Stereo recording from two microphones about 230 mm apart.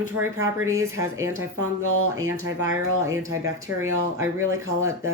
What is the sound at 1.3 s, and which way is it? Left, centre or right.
Speech, right.